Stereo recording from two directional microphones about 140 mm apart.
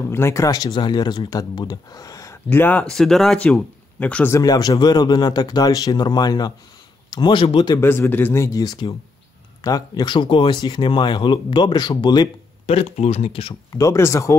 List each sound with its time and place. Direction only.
0.1 s speech: 20° left (ahead or behind)
4.4 s speech: 25° left (ahead or behind)
7.7 s speech: 20° left (ahead or behind)
12.6 s speech: 50° left (ahead or behind)
13.7 s speech: 20° left (ahead or behind)